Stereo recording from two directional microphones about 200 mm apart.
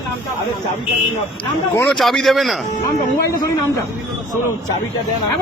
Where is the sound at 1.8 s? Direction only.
5° left (ahead or behind).